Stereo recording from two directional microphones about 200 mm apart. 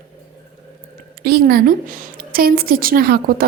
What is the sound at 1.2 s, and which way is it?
A woman's voice, 50° right (ahead or behind).